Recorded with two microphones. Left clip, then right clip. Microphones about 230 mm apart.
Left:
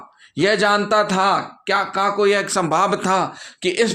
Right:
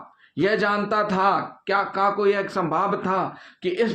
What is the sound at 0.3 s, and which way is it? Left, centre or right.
Speech, left.